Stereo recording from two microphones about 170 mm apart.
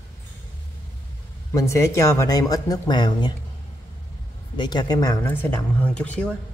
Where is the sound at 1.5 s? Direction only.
15° left (ahead or behind).